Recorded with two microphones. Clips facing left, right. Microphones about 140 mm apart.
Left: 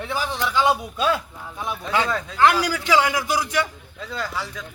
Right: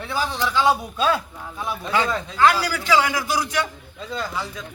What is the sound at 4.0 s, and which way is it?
Speech, 20° right (ahead or behind).